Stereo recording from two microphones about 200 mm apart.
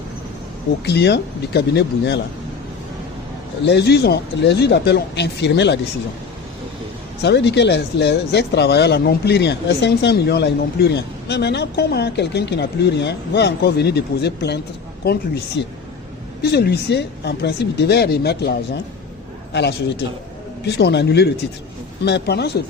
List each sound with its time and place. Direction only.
0.9 s speech: 55° left (ahead or behind)
3.6 s speech: 55° left (ahead or behind)
7.2 s speech: 60° left (ahead or behind)
19.5 s speech: 55° left (ahead or behind)